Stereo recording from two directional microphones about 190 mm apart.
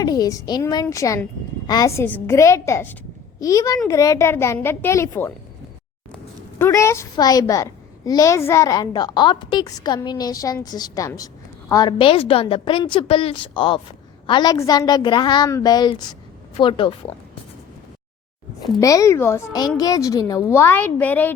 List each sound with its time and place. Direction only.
0.0 s a child's voice: 20° left (ahead or behind)
6.6 s a child's voice: 15° left (ahead or behind)
18.8 s a woman's voice: 15° left (ahead or behind)